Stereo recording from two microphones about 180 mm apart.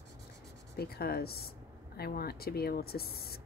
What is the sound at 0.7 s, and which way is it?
Speech, 60° left (ahead or behind).